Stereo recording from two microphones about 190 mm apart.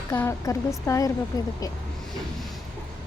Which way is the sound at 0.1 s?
15° left (ahead or behind).